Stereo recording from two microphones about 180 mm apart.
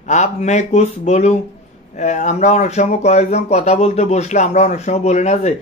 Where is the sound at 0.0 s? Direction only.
40° left (ahead or behind).